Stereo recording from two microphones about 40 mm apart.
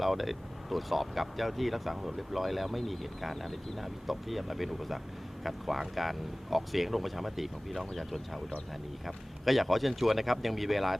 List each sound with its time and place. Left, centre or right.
0.0 s speech: centre